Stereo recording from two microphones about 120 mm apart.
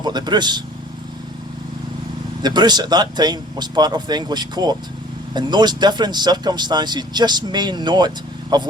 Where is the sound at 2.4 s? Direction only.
35° right (ahead or behind).